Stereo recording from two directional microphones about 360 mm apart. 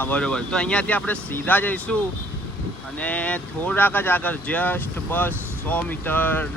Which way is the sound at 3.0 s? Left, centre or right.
Centre.